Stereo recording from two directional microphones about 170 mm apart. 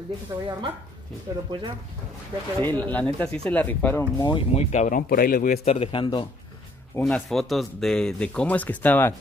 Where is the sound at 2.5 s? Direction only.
10° left (ahead or behind).